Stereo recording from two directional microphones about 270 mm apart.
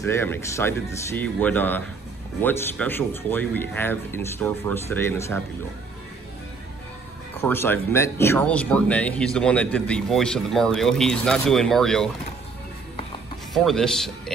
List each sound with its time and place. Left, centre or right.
0.0 s speech: centre
7.3 s speech: centre
13.5 s speech: centre